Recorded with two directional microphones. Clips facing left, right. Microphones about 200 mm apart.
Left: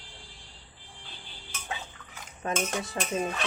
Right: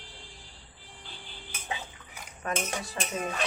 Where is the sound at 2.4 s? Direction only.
25° left (ahead or behind).